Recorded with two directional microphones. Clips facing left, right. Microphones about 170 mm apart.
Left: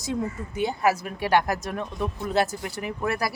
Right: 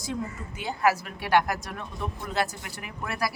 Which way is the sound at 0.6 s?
20° left (ahead or behind).